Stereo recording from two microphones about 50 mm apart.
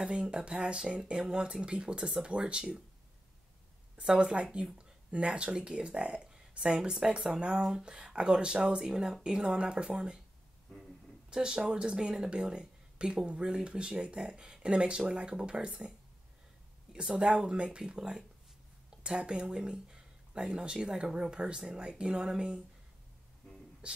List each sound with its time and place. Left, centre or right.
0.0 s speech: centre
3.9 s speech: centre
11.2 s speech: centre
16.9 s speech: centre